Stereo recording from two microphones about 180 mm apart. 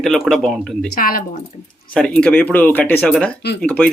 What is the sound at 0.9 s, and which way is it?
Speech, 50° left (ahead or behind).